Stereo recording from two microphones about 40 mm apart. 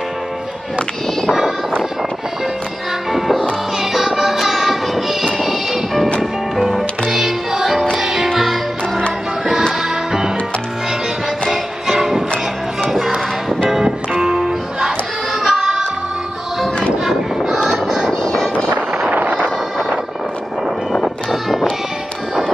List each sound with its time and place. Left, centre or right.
3.1 s music: centre
11.5 s music: centre
13.8 s music: centre
17.8 s music: centre
18.2 s vehicle: centre
19.1 s a sound: right
20.9 s a sound: centre